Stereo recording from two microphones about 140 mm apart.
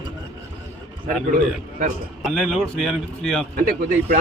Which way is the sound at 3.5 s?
90° right.